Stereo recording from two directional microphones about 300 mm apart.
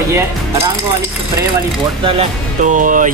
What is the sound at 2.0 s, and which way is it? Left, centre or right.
Speech, right.